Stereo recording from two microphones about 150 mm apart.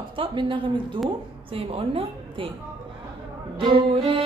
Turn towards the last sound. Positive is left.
turn(degrees=-35)  # may be behind; listen again after turning